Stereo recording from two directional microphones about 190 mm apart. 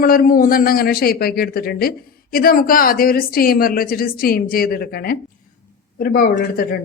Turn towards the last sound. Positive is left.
turn(degrees=50)  # may be behind; listen again after turning